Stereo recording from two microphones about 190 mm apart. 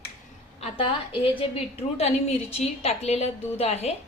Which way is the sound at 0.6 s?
30° left (ahead or behind).